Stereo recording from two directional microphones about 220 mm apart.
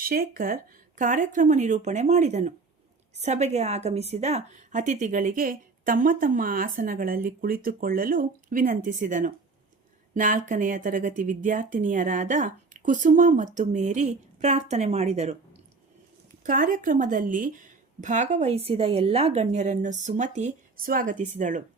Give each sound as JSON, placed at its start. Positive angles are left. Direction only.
{"t": 0.0, "sound": "a woman's voice", "side_deg": -40}
{"t": 16.4, "sound": "a woman's voice", "side_deg": -35}